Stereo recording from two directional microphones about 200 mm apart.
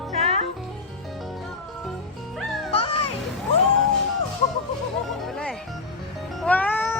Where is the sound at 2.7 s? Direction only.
30° left (ahead or behind).